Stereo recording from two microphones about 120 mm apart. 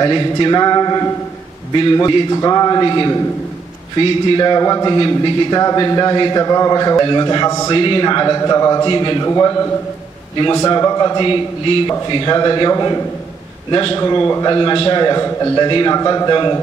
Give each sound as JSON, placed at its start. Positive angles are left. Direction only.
{"t": 0.0, "sound": "a man's voice", "side_deg": 35}
{"t": 7.7, "sound": "a man's voice", "side_deg": 45}
{"t": 13.7, "sound": "a man's voice", "side_deg": 45}
{"t": 13.9, "sound": "a man's voice", "side_deg": 25}
{"t": 14.5, "sound": "a man's voice", "side_deg": 35}